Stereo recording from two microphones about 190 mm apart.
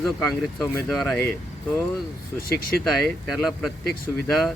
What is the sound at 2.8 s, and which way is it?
Speech, centre (ahead or behind).